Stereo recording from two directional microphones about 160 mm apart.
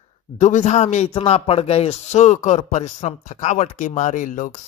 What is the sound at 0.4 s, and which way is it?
Speech, 50° left (ahead or behind).